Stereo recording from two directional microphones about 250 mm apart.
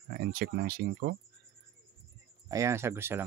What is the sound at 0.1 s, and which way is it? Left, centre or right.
Speech, right.